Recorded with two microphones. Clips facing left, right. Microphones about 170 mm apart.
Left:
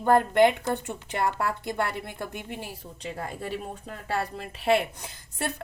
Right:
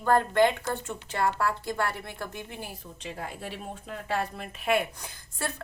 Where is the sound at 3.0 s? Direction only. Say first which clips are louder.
Left 3 dB; 40° left (ahead or behind).